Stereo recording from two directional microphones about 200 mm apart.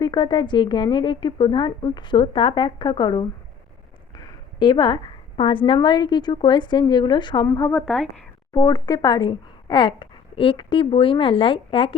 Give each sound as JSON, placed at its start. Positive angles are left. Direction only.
{"t": 0.0, "sound": "a woman's voice", "side_deg": 20}
{"t": 4.6, "sound": "a woman's voice", "side_deg": 20}
{"t": 8.5, "sound": "a woman's voice", "side_deg": 20}